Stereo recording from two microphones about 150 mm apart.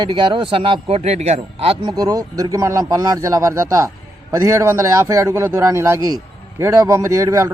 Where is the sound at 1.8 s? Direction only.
25° right (ahead or behind).